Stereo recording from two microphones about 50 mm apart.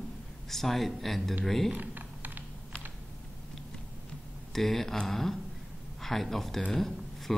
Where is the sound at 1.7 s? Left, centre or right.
Right.